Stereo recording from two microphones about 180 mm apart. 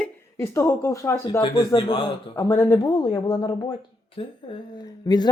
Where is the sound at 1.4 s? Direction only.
25° left (ahead or behind).